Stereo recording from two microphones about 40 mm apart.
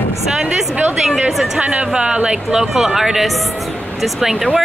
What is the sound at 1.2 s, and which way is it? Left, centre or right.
Speech, centre.